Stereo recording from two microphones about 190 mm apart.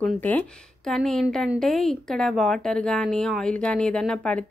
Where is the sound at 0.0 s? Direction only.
10° left (ahead or behind).